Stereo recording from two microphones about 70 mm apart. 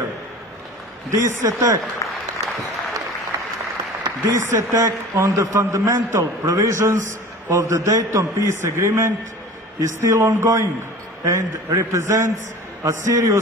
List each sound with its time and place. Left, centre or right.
1.1 s a man's voice: right
2.0 s applause: left
3.3 s applause: right
4.0 s a man's voice: right